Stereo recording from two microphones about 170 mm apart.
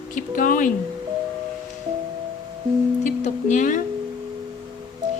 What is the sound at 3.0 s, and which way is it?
Music, 45° left (ahead or behind).